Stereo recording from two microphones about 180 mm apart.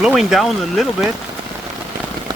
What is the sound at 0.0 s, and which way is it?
Speech, 5° right (ahead or behind).